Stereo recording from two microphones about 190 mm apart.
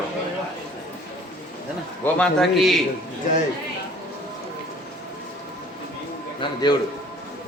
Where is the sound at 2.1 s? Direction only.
5° left (ahead or behind).